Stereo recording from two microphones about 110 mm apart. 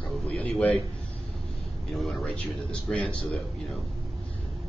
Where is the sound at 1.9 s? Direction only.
Centre (ahead or behind).